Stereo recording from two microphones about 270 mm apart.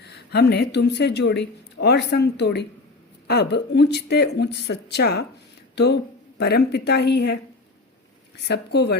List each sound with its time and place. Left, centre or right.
0.0 s speech: left
8.4 s speech: left